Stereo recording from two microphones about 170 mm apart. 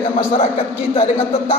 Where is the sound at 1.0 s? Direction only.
35° left (ahead or behind).